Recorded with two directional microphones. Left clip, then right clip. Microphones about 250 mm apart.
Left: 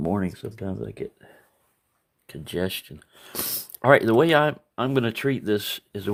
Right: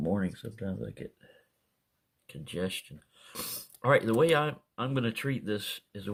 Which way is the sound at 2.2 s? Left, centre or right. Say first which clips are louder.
Left 7 dB; left.